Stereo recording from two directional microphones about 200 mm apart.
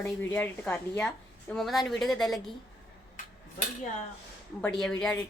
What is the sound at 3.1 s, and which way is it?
Dishes, 40° left (ahead or behind).